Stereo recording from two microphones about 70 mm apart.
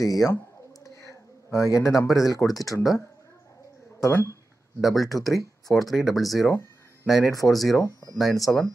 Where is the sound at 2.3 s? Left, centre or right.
Left.